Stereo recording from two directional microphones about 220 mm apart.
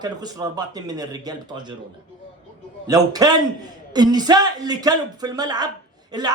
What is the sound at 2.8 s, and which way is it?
A man's voice, 15° right (ahead or behind).